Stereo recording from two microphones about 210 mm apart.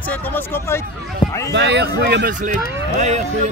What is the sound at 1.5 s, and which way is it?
Speech, 55° right (ahead or behind).